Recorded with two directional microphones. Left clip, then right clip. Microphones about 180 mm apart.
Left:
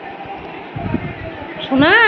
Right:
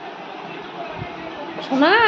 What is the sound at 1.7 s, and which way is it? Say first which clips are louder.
Speech: left 4 dB; 15° left (ahead or behind).